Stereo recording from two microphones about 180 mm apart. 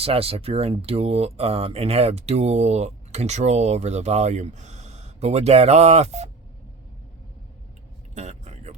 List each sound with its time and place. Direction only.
0.0 s speech: 30° right (ahead or behind)
8.1 s vehicle: 40° right (ahead or behind)